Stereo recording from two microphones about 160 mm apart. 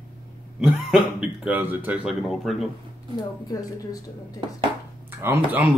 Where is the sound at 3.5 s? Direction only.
20° left (ahead or behind).